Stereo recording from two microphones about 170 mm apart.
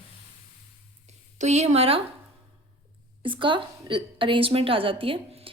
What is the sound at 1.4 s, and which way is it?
Speech, 40° right (ahead or behind).